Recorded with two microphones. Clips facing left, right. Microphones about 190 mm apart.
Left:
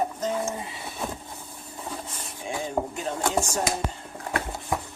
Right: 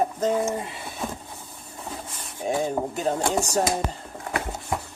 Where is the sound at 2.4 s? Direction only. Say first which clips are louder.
Right 4 dB; 40° right (ahead or behind).